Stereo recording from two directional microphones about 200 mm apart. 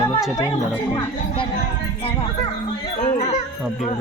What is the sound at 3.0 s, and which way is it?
Speech, 35° left (ahead or behind).